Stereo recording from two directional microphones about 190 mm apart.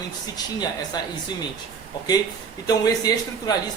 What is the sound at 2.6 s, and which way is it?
Speech, 20° left (ahead or behind).